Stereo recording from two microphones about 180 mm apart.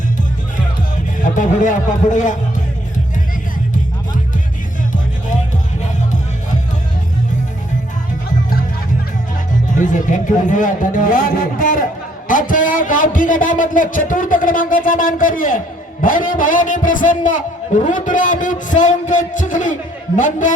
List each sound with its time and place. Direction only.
1.2 s a man's voice: 45° left (ahead or behind)
9.7 s a man's voice: 45° left (ahead or behind)